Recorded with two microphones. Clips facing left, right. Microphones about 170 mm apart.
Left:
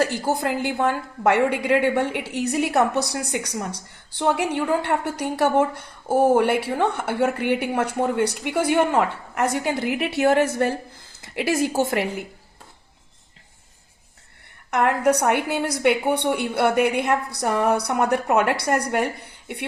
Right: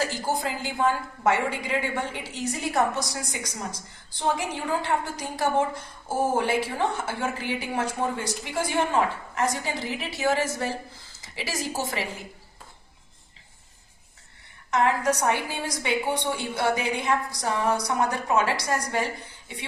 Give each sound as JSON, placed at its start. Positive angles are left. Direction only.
{"t": 0.0, "sound": "a woman's voice", "side_deg": 60}
{"t": 14.7, "sound": "a woman's voice", "side_deg": 60}